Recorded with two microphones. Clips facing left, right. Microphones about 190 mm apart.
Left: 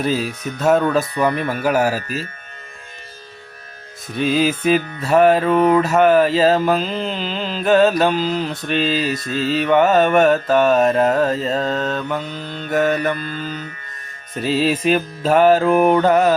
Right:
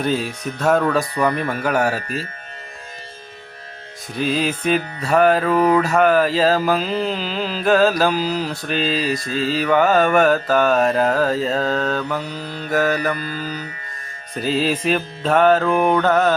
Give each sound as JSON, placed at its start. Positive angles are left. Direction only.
{"t": 0.0, "sound": "mantra", "side_deg": 0}
{"t": 4.1, "sound": "mantra", "side_deg": 5}
{"t": 12.3, "sound": "mantra", "side_deg": -35}
{"t": 12.7, "sound": "mantra", "side_deg": 0}
{"t": 14.3, "sound": "mantra", "side_deg": 0}